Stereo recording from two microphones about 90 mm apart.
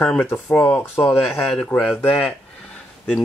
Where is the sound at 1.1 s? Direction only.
Centre (ahead or behind); by 2.4 s 15° left (ahead or behind).